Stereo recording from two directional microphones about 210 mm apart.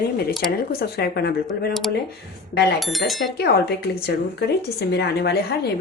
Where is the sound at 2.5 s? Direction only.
50° left (ahead or behind).